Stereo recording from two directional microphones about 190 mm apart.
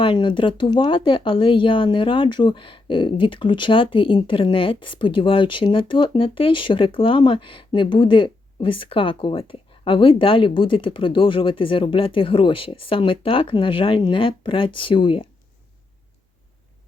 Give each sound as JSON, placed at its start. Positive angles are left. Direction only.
{"t": 0.0, "sound": "speech", "side_deg": 25}